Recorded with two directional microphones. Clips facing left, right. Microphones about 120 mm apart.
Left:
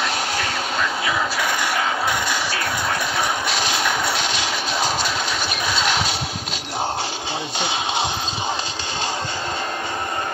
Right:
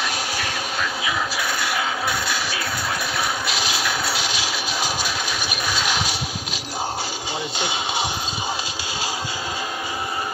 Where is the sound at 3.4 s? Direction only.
5° right (ahead or behind).